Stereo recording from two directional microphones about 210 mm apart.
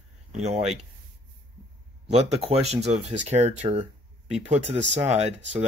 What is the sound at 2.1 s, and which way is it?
Speech, 30° right (ahead or behind).